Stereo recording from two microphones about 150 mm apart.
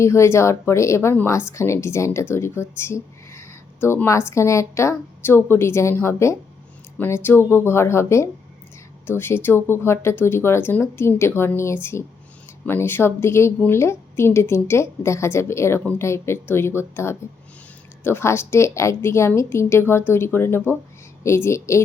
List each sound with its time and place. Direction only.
0.0 s a woman's voice: 20° left (ahead or behind)